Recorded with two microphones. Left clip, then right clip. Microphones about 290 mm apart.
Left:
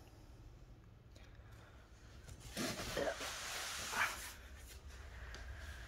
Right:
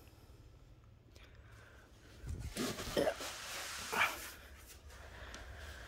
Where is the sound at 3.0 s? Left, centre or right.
Right.